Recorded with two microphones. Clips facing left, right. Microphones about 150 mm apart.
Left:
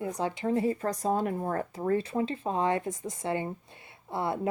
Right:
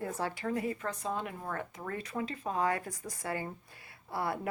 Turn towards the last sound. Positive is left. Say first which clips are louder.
# left 4 dB
turn(degrees=25)  # may be behind; listen again after turning